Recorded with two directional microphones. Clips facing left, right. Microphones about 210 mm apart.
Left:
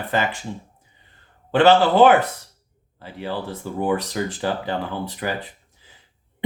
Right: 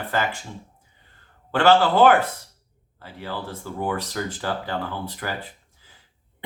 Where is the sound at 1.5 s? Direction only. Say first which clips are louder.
Left 3 dB; 20° left (ahead or behind).